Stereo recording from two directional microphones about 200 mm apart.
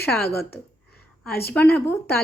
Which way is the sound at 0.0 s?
10° left (ahead or behind).